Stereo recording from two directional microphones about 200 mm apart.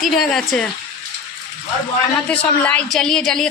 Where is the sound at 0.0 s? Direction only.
Centre (ahead or behind).